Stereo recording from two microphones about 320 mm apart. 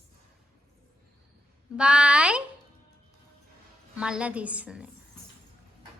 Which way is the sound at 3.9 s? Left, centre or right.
Centre.